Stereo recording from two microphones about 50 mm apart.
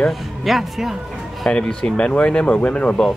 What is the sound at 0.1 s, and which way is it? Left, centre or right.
Speech, centre.